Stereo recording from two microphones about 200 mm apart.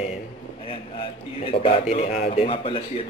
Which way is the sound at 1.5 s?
30° left (ahead or behind).